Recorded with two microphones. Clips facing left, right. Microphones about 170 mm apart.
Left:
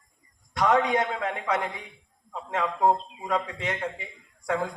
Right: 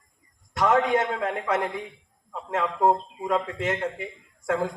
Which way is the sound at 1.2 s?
45° right (ahead or behind).